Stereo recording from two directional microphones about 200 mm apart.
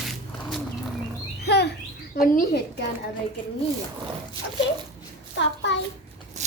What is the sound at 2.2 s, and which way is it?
Speech, 50° left (ahead or behind).